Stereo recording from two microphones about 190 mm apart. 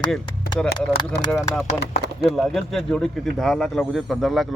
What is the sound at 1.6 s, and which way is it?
Speech, 60° left (ahead or behind).